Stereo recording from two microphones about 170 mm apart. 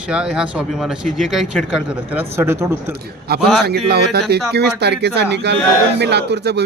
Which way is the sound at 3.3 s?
65° right (ahead or behind).